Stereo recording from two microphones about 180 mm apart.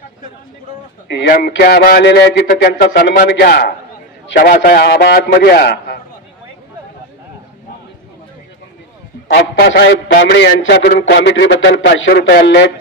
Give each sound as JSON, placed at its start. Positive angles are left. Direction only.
{"t": 1.0, "sound": "a man's voice", "side_deg": 60}
{"t": 9.3, "sound": "a man's voice", "side_deg": 60}